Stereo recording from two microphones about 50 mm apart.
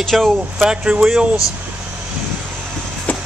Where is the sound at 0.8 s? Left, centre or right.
Right.